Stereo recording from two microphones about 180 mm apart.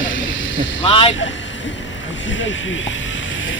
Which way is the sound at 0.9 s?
35° left (ahead or behind).